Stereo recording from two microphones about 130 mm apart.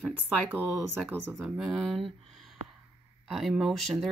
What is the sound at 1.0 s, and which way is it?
Speech, 15° right (ahead or behind).